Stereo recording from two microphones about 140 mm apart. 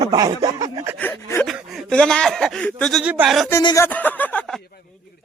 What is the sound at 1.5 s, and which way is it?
Speech, centre (ahead or behind).